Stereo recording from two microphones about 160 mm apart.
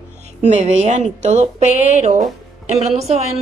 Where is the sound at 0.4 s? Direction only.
45° right (ahead or behind).